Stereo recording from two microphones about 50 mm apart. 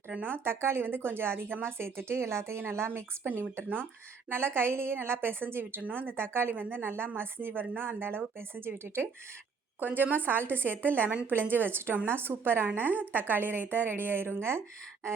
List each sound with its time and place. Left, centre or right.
0.2 s a woman's voice: right
3.5 s a woman's voice: right